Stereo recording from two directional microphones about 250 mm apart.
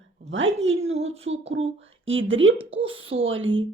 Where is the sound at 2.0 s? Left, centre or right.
Right.